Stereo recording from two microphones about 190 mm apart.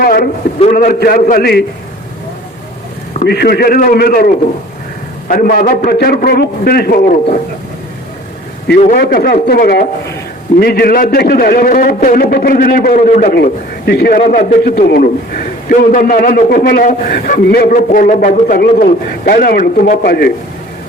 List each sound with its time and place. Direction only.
0.0 s a sound: 50° left (ahead or behind)
0.7 s a man's voice: 50° left (ahead or behind)
3.2 s a man's voice: 55° left (ahead or behind)
5.3 s a man's voice: 50° left (ahead or behind)
8.9 s a man's voice: 55° left (ahead or behind)